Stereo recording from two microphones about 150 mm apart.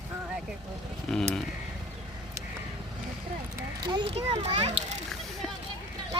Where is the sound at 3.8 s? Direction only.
30° right (ahead or behind).